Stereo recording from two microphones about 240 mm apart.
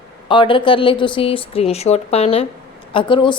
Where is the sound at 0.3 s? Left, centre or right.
Left.